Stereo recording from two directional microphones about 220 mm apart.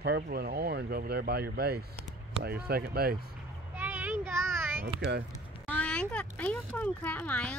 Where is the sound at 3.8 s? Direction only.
10° right (ahead or behind).